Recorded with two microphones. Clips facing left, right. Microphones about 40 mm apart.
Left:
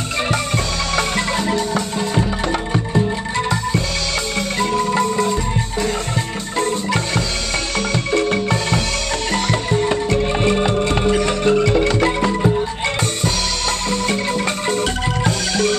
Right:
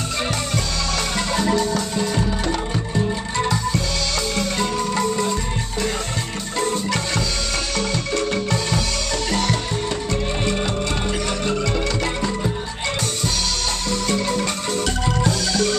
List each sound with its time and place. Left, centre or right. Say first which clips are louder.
0.9 s music: left 4 dB; centre
6.6 s marimba: left 2 dB; centre
7.7 s music: left 6 dB; left
13.8 s music: left 1 dB; left